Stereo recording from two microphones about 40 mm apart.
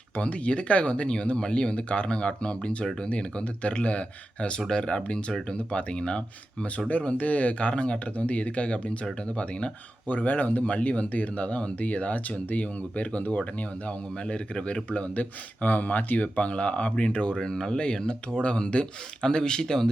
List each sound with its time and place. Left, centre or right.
0.2 s speech: left
10.1 s speech: left; by 19.9 s centre